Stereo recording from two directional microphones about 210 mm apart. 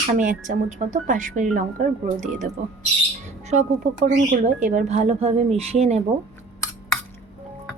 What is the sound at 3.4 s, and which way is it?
Speech, 35° right (ahead or behind).